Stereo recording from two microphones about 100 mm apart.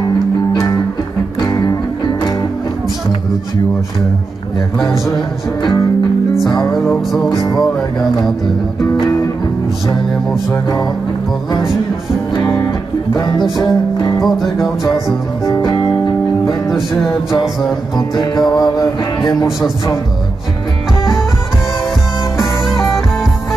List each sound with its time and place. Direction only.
1.4 s music: 40° left (ahead or behind)
4.7 s music: 5° left (ahead or behind)
6.6 s music: 5° left (ahead or behind)
7.3 s music: 40° left (ahead or behind)
12.4 s music: 30° left (ahead or behind)
13.1 s music: 45° left (ahead or behind)
14.2 s music: centre (ahead or behind)
15.4 s music: 40° left (ahead or behind)
16.7 s music: centre (ahead or behind)
17.9 s music: 45° left (ahead or behind)
22.4 s music: centre (ahead or behind)